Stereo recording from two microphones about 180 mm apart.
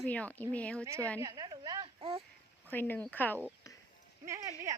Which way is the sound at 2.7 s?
10° left (ahead or behind).